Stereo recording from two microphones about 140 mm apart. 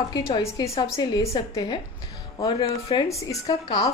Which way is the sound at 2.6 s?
40° left (ahead or behind).